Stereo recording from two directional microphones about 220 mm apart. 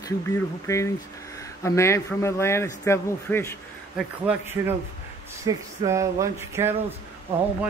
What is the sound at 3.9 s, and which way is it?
Speech, 5° right (ahead or behind).